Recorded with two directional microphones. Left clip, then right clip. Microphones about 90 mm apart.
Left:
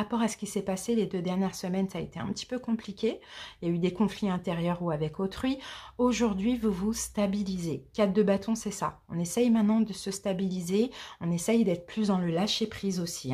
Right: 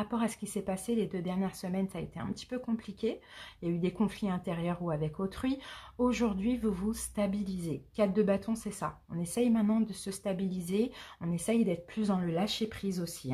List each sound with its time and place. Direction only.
0.0 s speech: 25° left (ahead or behind)